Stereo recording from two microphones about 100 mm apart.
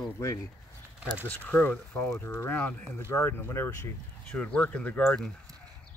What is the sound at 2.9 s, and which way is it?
Speech, 25° left (ahead or behind).